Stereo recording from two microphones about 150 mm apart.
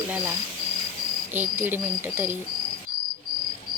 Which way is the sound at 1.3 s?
15° right (ahead or behind).